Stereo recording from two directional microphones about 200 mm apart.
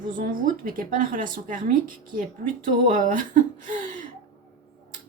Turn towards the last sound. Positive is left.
turn(degrees=-40)  # may be behind; listen again after turning